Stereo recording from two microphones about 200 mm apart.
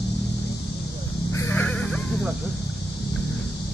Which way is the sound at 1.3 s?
10° left (ahead or behind).